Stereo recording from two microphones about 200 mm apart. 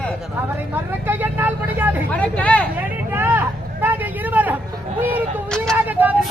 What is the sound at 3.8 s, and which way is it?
Vehicle, 10° right (ahead or behind).